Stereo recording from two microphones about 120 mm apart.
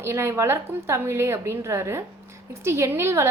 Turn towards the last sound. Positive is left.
turn(degrees=-20)  # may be behind; listen again after turning